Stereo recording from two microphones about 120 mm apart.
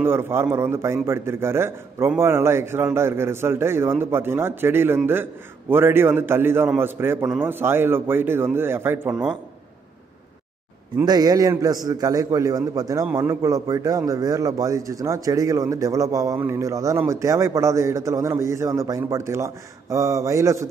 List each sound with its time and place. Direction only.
0.0 s a man's voice: 20° right (ahead or behind)
11.1 s a man's voice: 30° right (ahead or behind)